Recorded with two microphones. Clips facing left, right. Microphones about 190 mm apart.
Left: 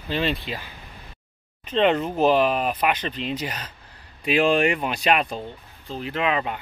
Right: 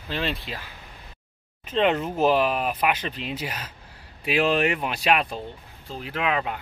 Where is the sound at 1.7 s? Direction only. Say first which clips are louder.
Left 2 dB; 5° right (ahead or behind).